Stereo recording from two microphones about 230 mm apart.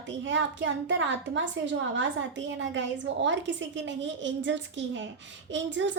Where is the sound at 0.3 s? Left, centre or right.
Right.